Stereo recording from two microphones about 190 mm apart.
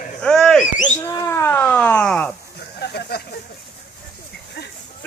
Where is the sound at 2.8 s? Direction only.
55° left (ahead or behind).